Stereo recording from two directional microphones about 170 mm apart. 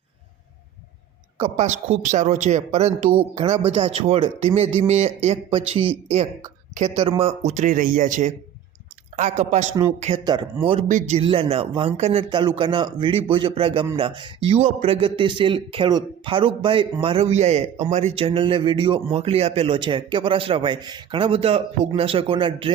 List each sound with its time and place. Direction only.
1.4 s a man's voice: 40° right (ahead or behind)
11.2 s speech: 35° right (ahead or behind)